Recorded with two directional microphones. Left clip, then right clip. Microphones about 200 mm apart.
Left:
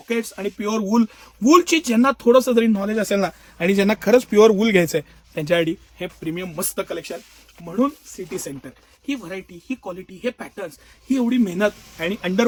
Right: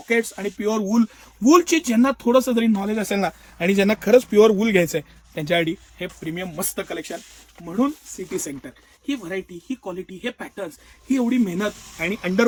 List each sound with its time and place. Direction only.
0.1 s speech: 15° left (ahead or behind)
9.0 s speech: 20° left (ahead or behind)